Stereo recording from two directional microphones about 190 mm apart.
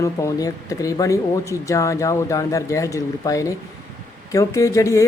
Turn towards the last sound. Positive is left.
turn(degrees=15)  # may be behind; listen again after turning